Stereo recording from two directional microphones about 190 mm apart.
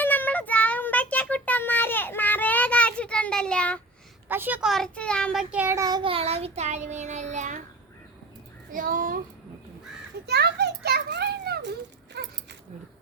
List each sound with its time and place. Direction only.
0.0 s child singing: 10° left (ahead or behind)
4.3 s child singing: 10° right (ahead or behind); by 7.6 s 40° right (ahead or behind)
8.7 s a sound: 45° right (ahead or behind)
10.2 s children playing: 60° right (ahead or behind)